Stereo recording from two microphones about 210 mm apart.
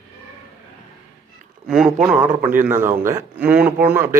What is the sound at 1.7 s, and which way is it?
Speech, centre (ahead or behind).